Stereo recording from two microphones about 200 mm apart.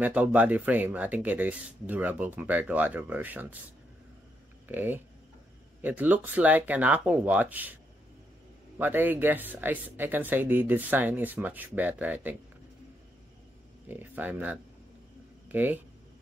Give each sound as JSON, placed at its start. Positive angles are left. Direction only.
{"t": 0.0, "sound": "speech", "side_deg": -10}
{"t": 4.6, "sound": "speech", "side_deg": -10}
{"t": 8.7, "sound": "speech", "side_deg": -10}
{"t": 13.8, "sound": "speech", "side_deg": -10}